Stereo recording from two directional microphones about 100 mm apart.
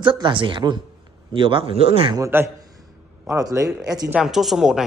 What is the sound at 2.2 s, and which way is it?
Speech, 25° right (ahead or behind).